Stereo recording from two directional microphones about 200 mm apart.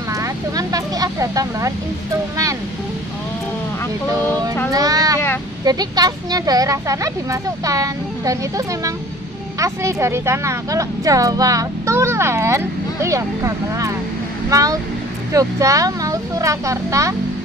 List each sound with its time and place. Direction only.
0.1 s vehicle: 15° right (ahead or behind)
4.7 s a sound: 20° right (ahead or behind)
5.6 s a woman's voice: 20° right (ahead or behind)